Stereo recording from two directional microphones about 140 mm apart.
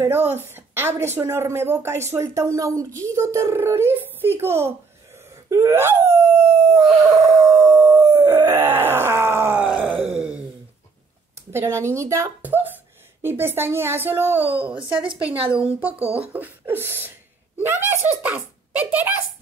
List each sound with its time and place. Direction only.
0.0 s a woman's voice: 15° right (ahead or behind)
7.4 s groan: 10° right (ahead or behind)
10.0 s a sound: 5° right (ahead or behind)
11.5 s a woman's voice: 20° right (ahead or behind)
14.8 s speech: 35° right (ahead or behind)
15.2 s a woman's voice: 10° right (ahead or behind)